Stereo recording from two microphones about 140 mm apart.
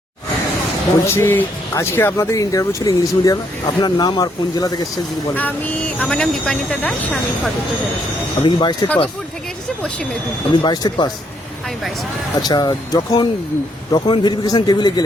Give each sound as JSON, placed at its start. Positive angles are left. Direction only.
{"t": 1.0, "sound": "speech", "side_deg": 15}
{"t": 5.3, "sound": "speech", "side_deg": 10}
{"t": 8.4, "sound": "a man's voice", "side_deg": 35}
{"t": 10.5, "sound": "a man's voice", "side_deg": 30}
{"t": 12.4, "sound": "a man's voice", "side_deg": 30}